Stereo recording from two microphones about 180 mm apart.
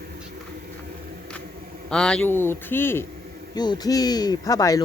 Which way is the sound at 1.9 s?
5° left (ahead or behind).